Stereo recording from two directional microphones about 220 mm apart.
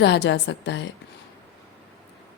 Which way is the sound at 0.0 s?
50° left (ahead or behind).